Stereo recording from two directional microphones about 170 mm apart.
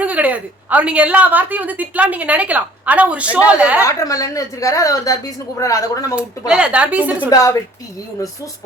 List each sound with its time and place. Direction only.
0.0 s a woman's voice: 10° right (ahead or behind)
3.8 s a woman's voice: 20° left (ahead or behind)
6.5 s a woman's voice: 5° right (ahead or behind)
7.3 s a woman's voice: 20° left (ahead or behind)